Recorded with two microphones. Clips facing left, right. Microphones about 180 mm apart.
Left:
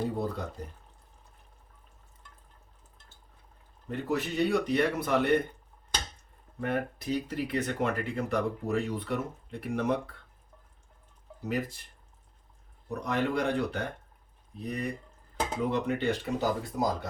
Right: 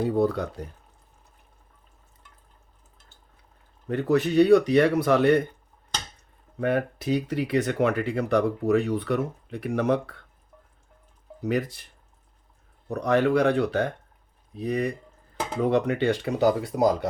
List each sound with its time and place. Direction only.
0.2 s speech: 80° right
3.8 s speech: 75° right (ahead or behind)
6.6 s speech: 75° right (ahead or behind)
11.4 s speech: 80° right
12.9 s speech: 75° right (ahead or behind)